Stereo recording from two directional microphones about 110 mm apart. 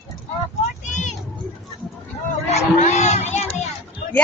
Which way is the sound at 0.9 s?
90° left.